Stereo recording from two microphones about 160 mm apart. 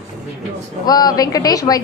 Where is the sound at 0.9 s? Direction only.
25° left (ahead or behind).